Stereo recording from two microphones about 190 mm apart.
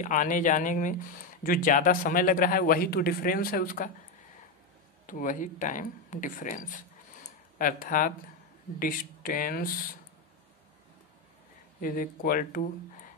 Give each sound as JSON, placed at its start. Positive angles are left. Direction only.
{"t": 0.0, "sound": "a man's voice", "side_deg": 45}
{"t": 5.0, "sound": "a man's voice", "side_deg": 45}
{"t": 7.2, "sound": "a sound", "side_deg": 45}
{"t": 8.7, "sound": "a man's voice", "side_deg": 50}
{"t": 11.8, "sound": "a man's voice", "side_deg": 45}